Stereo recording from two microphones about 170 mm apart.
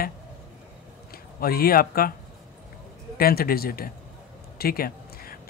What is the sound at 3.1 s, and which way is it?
Speech, 60° left (ahead or behind).